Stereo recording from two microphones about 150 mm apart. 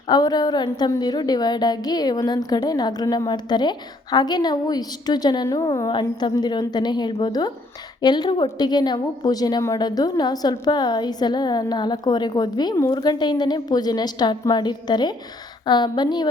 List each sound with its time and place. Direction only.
0.1 s a woman's voice: 25° left (ahead or behind)